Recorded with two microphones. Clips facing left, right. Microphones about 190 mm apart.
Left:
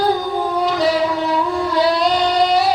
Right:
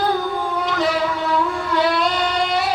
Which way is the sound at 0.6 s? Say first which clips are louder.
Left 4 dB; 35° left (ahead or behind).